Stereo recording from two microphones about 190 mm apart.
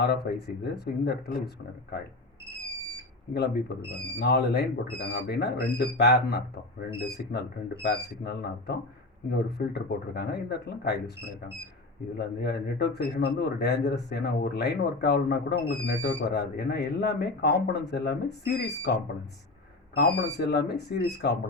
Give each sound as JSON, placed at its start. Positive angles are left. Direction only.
{"t": 0.0, "sound": "a man's voice", "side_deg": 55}
{"t": 3.3, "sound": "a man's voice", "side_deg": 60}
{"t": 12.1, "sound": "a man's voice", "side_deg": 60}
{"t": 20.0, "sound": "a man's voice", "side_deg": 60}